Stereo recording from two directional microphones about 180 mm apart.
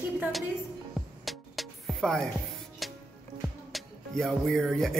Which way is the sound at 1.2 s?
Centre (ahead or behind).